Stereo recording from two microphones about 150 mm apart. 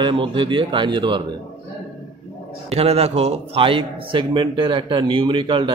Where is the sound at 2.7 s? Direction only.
40° right (ahead or behind).